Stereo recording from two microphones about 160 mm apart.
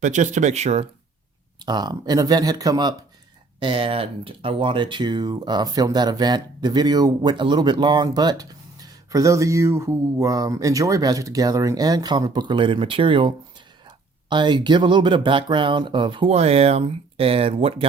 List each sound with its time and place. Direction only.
0.0 s speech: 50° right (ahead or behind)
1.6 s speech: 25° right (ahead or behind)